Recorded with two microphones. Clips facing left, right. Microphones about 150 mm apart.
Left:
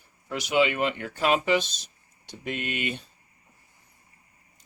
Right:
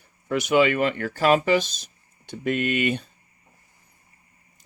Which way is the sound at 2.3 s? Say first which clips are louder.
Right 8 dB; 55° right (ahead or behind).